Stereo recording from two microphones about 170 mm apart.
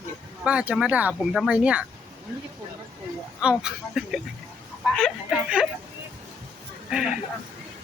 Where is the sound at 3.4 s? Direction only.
5° right (ahead or behind).